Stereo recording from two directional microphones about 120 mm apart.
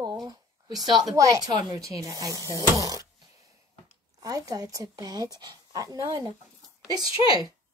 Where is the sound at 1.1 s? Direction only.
25° right (ahead or behind).